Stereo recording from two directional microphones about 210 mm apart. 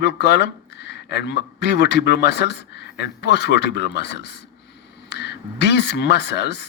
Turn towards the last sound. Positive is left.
turn(degrees=55)  # may be behind; listen again after turning